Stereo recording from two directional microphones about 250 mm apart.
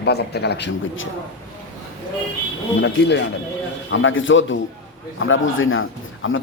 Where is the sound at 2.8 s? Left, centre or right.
Left.